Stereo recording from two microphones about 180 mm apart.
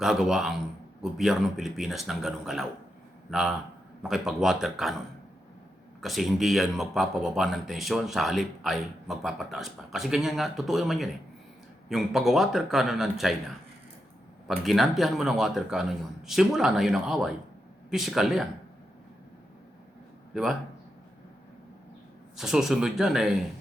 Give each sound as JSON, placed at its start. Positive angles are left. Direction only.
{"t": 0.0, "sound": "a man's voice", "side_deg": 0}
{"t": 6.0, "sound": "speech", "side_deg": 0}
{"t": 14.4, "sound": "speech", "side_deg": 0}
{"t": 20.3, "sound": "a man's voice", "side_deg": 0}
{"t": 22.4, "sound": "speech", "side_deg": 0}